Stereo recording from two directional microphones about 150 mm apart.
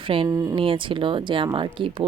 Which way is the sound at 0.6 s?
35° right (ahead or behind).